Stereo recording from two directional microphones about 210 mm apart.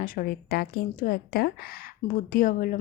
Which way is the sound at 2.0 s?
30° left (ahead or behind).